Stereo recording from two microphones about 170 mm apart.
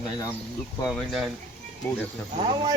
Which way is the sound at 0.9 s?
Centre (ahead or behind).